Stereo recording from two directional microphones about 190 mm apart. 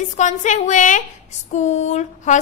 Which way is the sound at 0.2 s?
40° left (ahead or behind).